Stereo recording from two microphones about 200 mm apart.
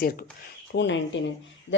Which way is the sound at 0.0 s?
45° left (ahead or behind).